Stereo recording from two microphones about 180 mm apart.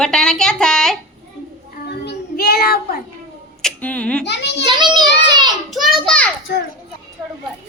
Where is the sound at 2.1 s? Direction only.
60° left (ahead or behind).